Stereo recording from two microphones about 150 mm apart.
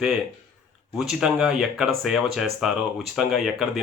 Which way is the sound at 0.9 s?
5° right (ahead or behind).